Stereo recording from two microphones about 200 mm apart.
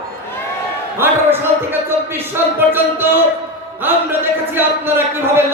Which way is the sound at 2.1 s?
10° right (ahead or behind).